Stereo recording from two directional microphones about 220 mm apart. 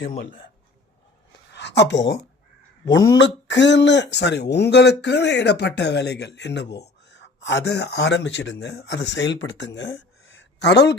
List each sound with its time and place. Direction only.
1.5 s speech: 50° left (ahead or behind)
3.2 s speech: 55° left (ahead or behind)